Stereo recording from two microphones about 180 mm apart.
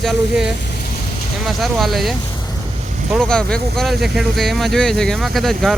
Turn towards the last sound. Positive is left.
turn(degrees=0)  # may be behind; listen again after turning